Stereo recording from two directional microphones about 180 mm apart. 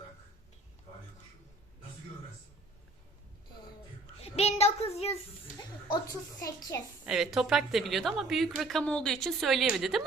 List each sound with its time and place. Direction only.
4.2 s child singing: 35° left (ahead or behind)
6.4 s a child's voice: 20° left (ahead or behind)
7.0 s a woman's voice: centre (ahead or behind)